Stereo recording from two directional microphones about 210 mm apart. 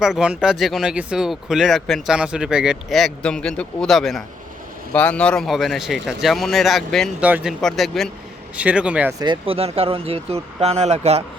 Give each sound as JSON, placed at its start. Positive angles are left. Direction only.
{"t": 0.0, "sound": "speech", "side_deg": -5}
{"t": 9.2, "sound": "speech", "side_deg": -25}